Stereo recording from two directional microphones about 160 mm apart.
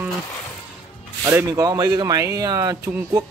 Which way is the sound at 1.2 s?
20° right (ahead or behind).